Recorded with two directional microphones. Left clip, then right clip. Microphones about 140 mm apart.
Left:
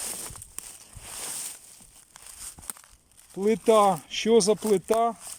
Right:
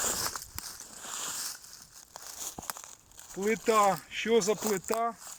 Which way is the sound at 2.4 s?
35° right (ahead or behind).